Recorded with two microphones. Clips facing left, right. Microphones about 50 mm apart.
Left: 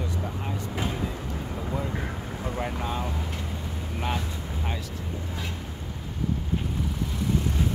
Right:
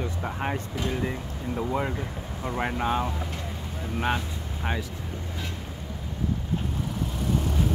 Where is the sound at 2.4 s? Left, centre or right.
Right.